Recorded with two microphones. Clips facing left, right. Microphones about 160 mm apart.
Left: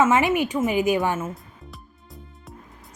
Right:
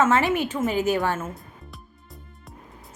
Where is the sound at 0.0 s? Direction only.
15° left (ahead or behind).